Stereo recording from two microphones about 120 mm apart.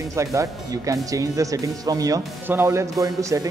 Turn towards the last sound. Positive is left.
turn(degrees=-30)  # may be behind; listen again after turning